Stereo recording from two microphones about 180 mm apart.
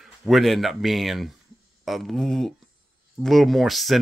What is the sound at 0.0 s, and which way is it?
Speech, centre (ahead or behind).